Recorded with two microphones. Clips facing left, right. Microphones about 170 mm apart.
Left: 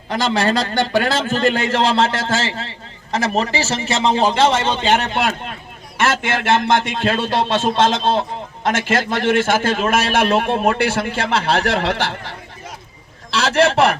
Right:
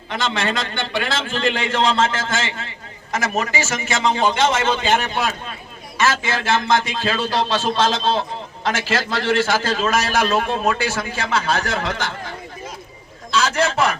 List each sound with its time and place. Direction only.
0.1 s a man's voice: 35° left (ahead or behind)
5.0 s a man's voice: 65° left (ahead or behind)
7.2 s a man's voice: 25° left (ahead or behind)
8.6 s a man's voice: 50° left (ahead or behind); by 12.1 s 65° left (ahead or behind)
13.3 s a man's voice: 65° left (ahead or behind)